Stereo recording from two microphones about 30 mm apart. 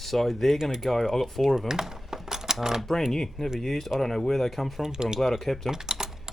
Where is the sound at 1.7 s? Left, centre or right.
Centre.